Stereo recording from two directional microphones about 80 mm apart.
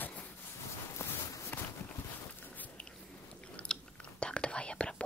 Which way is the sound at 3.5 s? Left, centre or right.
Centre.